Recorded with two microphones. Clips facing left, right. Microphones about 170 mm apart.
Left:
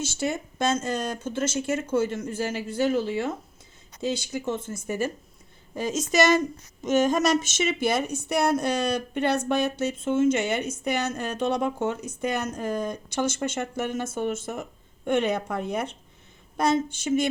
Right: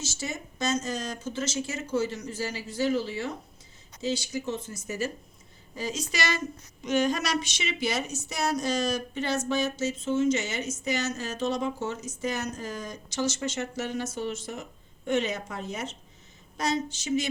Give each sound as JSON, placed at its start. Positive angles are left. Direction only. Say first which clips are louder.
{"t": 0.0, "sound": "speech", "louder": "left 7 dB", "side_deg": 60}